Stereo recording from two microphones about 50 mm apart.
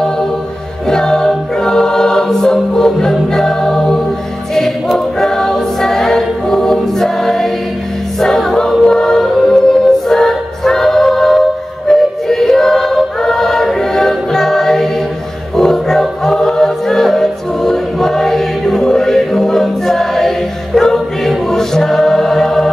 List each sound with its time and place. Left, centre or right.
0.8 s choir: centre
8.8 s music: centre
15.5 s choir: centre